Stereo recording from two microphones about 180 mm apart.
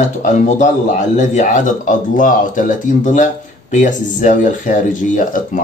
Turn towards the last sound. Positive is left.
turn(degrees=45)  # may be behind; listen again after turning